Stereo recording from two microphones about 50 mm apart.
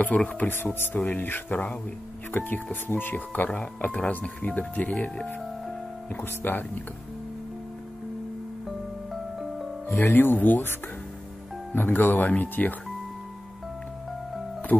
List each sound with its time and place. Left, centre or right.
0.0 s speech: left
0.5 s speech: left
3.5 s speech: left
4.9 s speech: centre
6.2 s speech: left
9.1 s music: centre
10.1 s speech: left
11.7 s speech: left